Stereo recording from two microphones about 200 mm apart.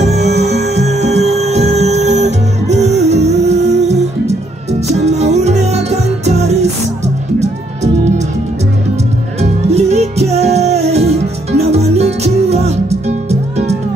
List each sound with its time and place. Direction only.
0.0 s music: 35° right (ahead or behind)
9.4 s music: 35° right (ahead or behind)